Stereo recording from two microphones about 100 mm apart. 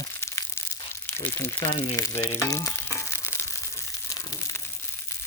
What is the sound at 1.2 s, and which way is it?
Speech, 25° left (ahead or behind).